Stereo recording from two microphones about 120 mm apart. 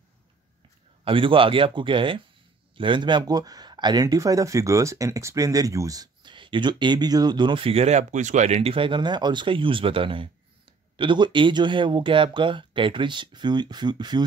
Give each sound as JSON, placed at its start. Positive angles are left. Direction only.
{"t": 1.0, "sound": "speech", "side_deg": -45}